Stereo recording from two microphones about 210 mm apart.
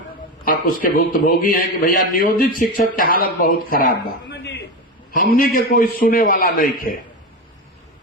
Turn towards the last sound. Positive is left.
turn(degrees=40)  # may be behind; listen again after turning